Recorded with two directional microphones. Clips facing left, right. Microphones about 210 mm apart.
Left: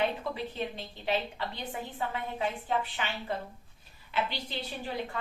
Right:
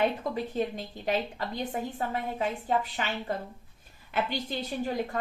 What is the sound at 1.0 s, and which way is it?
A woman's voice, 45° right (ahead or behind).